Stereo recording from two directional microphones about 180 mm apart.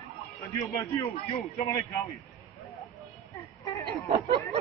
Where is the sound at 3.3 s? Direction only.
20° left (ahead or behind).